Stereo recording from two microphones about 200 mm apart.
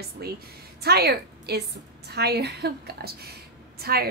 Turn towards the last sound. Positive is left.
turn(degrees=-50)  # may be behind; listen again after turning